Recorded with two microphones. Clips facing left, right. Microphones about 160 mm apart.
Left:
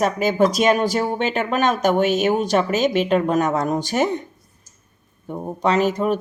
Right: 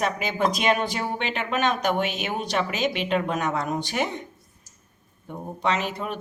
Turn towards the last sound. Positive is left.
turn(degrees=40)  # may be behind; listen again after turning